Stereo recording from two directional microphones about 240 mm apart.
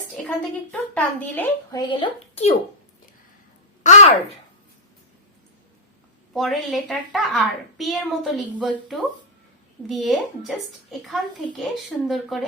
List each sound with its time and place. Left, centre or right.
0.3 s a woman's voice: centre
1.9 s a woman's voice: left
6.3 s a woman's voice: centre